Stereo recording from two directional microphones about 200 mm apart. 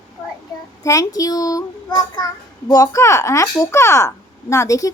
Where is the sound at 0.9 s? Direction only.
15° left (ahead or behind).